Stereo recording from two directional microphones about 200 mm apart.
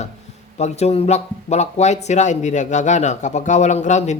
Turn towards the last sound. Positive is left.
turn(degrees=35)  # may be behind; listen again after turning